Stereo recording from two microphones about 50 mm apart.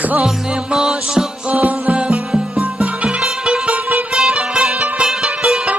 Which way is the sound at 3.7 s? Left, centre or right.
Right.